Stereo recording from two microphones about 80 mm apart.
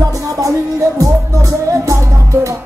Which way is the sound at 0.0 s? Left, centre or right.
Right.